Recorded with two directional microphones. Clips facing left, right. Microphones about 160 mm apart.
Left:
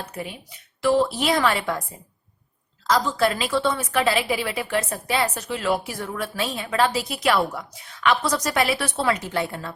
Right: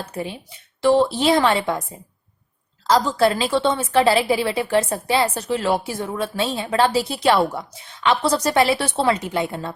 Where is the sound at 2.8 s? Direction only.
30° right (ahead or behind).